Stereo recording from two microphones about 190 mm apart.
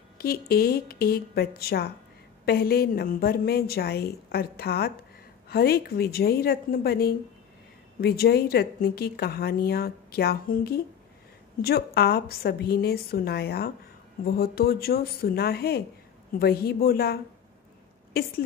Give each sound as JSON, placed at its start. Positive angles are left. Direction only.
{"t": 0.2, "sound": "speech", "side_deg": 55}